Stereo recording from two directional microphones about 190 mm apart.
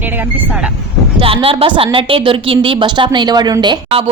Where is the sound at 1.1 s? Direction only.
30° right (ahead or behind).